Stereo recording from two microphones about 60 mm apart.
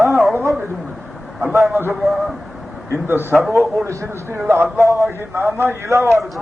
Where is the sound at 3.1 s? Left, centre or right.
Right.